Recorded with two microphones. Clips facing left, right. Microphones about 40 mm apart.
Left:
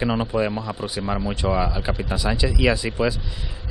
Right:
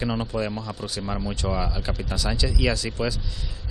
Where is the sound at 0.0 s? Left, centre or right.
Left.